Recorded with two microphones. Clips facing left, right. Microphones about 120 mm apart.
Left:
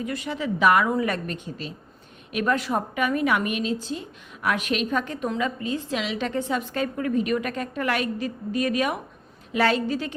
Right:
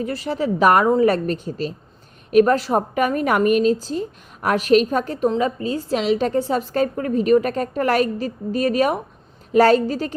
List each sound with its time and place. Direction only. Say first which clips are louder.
0.0 s a woman's voice: right 6 dB; 35° right (ahead or behind)